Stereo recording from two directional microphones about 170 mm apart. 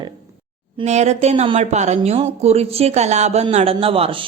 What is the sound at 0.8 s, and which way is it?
Speech, 40° right (ahead or behind).